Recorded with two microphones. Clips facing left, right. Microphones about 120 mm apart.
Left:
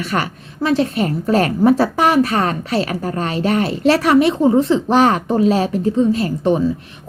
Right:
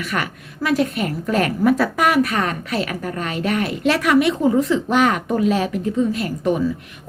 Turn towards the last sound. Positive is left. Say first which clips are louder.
# left 4 dB
turn(degrees=30)  # may be behind; listen again after turning